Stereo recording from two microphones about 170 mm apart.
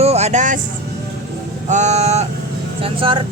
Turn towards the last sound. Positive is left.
turn(degrees=-30)  # may be behind; listen again after turning